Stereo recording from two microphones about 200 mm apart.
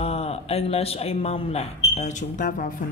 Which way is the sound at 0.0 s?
30° left (ahead or behind).